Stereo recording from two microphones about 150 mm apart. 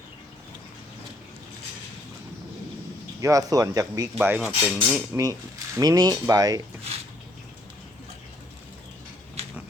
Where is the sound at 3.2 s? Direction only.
20° right (ahead or behind).